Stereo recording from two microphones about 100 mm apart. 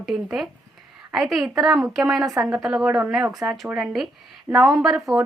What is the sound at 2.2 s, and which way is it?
Speech, 35° right (ahead or behind).